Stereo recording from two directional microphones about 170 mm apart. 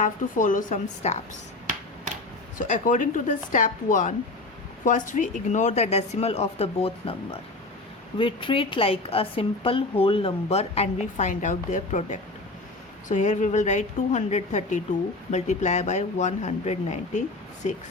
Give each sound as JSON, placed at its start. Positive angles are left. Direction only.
{"t": 0.0, "sound": "speech", "side_deg": 50}
{"t": 2.6, "sound": "a woman's voice", "side_deg": 50}
{"t": 8.2, "sound": "a woman's voice", "side_deg": 30}